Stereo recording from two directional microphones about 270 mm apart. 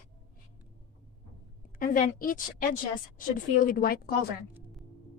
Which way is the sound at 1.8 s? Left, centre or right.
Left.